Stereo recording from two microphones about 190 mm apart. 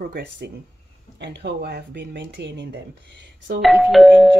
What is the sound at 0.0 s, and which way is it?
Speech, 55° right (ahead or behind).